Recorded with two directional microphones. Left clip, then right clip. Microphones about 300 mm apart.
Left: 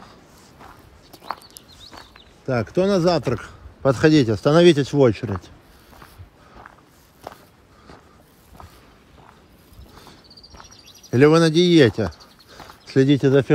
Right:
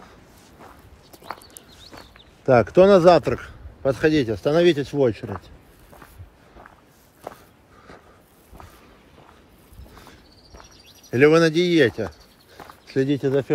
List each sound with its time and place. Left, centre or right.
1.5 s speech: centre; by 5.3 s left
7.2 s walk: centre
10.6 s speech: centre